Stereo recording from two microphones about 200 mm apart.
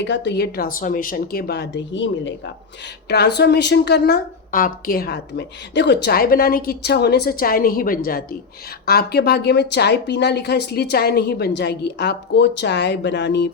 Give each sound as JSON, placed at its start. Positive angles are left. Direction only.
{"t": 0.0, "sound": "a woman's voice", "side_deg": 60}
{"t": 3.1, "sound": "a woman's voice", "side_deg": 55}